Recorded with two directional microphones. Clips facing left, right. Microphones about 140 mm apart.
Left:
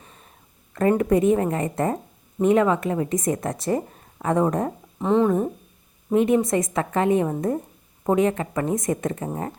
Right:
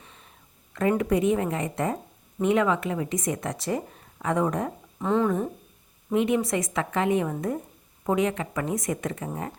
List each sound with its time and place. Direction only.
0.0 s a sound: 40° left (ahead or behind)
0.7 s speech: 40° left (ahead or behind)
4.9 s speech: 20° left (ahead or behind)
6.1 s speech: 40° left (ahead or behind)